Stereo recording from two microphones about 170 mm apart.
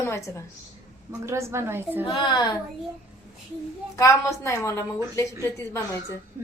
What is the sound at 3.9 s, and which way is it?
Speech, 20° left (ahead or behind).